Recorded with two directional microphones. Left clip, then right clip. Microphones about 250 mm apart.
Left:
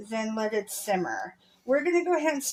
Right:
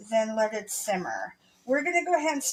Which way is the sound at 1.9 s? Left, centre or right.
Left.